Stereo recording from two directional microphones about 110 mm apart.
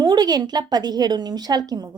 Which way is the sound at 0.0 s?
40° right (ahead or behind).